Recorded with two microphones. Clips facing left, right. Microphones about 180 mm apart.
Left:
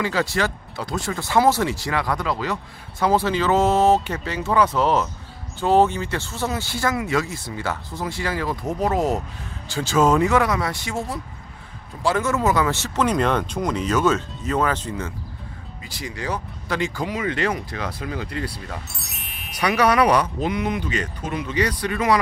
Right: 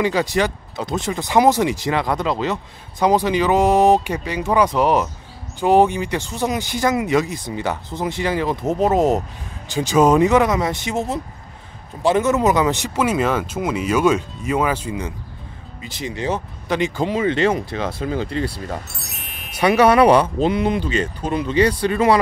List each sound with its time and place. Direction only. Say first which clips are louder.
0.0 s speech: right 4 dB; 15° right (ahead or behind)
18.9 s music: right 2 dB; centre (ahead or behind)
19.6 s speech: right 5 dB; 25° right (ahead or behind)